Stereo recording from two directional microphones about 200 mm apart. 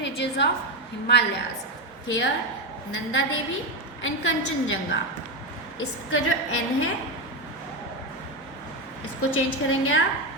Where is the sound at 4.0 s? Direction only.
75° left (ahead or behind).